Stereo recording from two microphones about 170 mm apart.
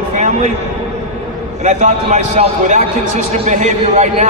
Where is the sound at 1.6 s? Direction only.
45° right (ahead or behind).